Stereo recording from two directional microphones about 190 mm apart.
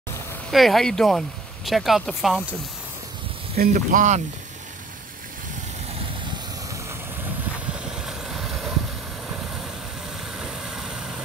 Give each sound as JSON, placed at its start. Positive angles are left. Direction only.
{"t": 0.5, "sound": "speech", "side_deg": 0}
{"t": 3.5, "sound": "speech", "side_deg": -45}
{"t": 8.0, "sound": "vehicle", "side_deg": -5}
{"t": 10.4, "sound": "vehicle", "side_deg": -5}